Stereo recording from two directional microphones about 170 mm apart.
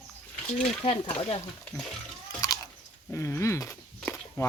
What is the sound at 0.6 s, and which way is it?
Speech, 35° left (ahead or behind).